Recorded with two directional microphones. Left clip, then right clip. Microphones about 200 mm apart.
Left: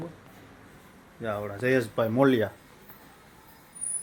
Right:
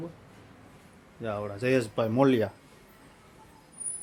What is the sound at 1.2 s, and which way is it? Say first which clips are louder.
Speech: left 2 dB; 5° right (ahead or behind).